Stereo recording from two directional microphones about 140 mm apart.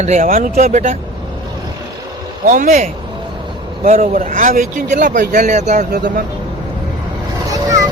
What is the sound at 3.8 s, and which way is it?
Speech, 50° right (ahead or behind).